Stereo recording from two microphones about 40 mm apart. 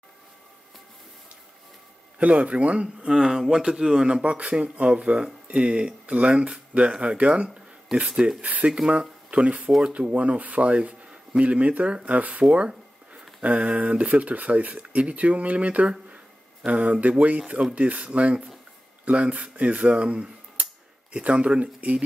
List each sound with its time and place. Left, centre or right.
2.1 s speech: right
3.1 s speech: centre
4.2 s speech: right
7.4 s speech: centre
8.4 s speech: right
12.4 s a sound: right
13.4 s speech: right
20.6 s a sound: right
21.1 s speech: right